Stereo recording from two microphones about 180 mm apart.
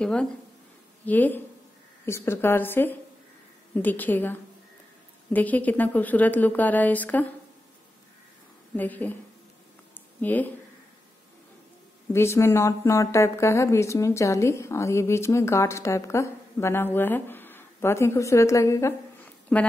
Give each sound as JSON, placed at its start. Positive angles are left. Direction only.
{"t": 0.0, "sound": "speech", "side_deg": 5}
{"t": 8.7, "sound": "speech", "side_deg": 10}
{"t": 10.2, "sound": "speech", "side_deg": 10}
{"t": 12.1, "sound": "speech", "side_deg": 15}